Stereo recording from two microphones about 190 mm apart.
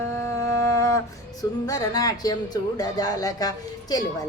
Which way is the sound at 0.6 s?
15° left (ahead or behind).